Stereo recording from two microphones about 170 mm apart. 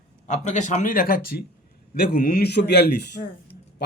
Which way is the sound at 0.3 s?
45° left (ahead or behind).